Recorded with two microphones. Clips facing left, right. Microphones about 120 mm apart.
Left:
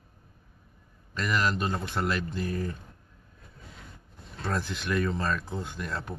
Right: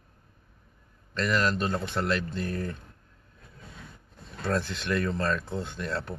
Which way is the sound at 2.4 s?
55° right (ahead or behind).